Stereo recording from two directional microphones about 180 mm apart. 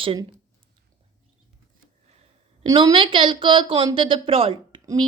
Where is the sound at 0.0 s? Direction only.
30° right (ahead or behind).